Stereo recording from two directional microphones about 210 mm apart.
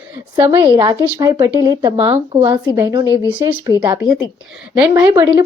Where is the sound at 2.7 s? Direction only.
15° right (ahead or behind).